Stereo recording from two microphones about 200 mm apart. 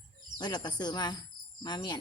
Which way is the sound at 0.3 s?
20° left (ahead or behind).